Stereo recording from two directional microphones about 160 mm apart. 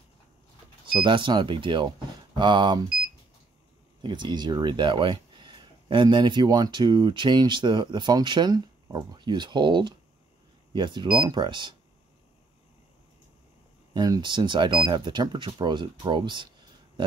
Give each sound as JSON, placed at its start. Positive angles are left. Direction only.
{"t": 0.9, "sound": "speech", "side_deg": -30}
{"t": 4.0, "sound": "speech", "side_deg": -30}
{"t": 13.9, "sound": "speech", "side_deg": -25}